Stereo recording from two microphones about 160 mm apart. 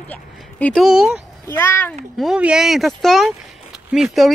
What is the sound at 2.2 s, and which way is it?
Speech, 5° right (ahead or behind).